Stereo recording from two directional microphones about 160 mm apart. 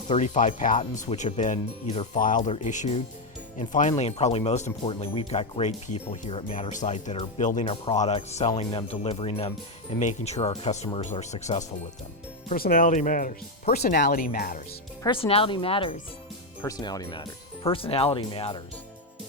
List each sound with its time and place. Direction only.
0.1 s speech: 50° left (ahead or behind)
2.1 s speech: 55° left (ahead or behind)
12.5 s speech: 65° left (ahead or behind)
13.9 s speech: 65° left (ahead or behind)
15.0 s speech: 35° left (ahead or behind)
16.6 s speech: 20° left (ahead or behind)